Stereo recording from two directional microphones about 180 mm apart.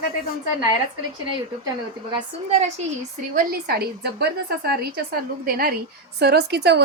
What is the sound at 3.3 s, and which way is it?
A woman's voice, 60° right (ahead or behind).